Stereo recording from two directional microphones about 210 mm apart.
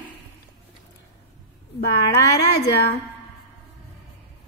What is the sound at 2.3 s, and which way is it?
Speech, 55° left (ahead or behind).